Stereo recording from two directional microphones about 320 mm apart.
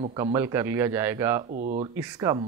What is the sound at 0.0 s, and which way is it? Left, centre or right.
Speech, centre.